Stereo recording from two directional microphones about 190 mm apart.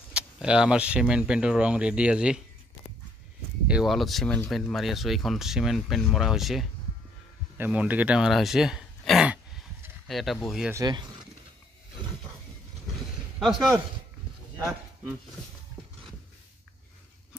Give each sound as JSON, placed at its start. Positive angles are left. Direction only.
{"t": 0.1, "sound": "speech", "side_deg": -5}
{"t": 3.6, "sound": "speech", "side_deg": 0}
{"t": 10.7, "sound": "speech", "side_deg": -20}
{"t": 14.6, "sound": "speech", "side_deg": 0}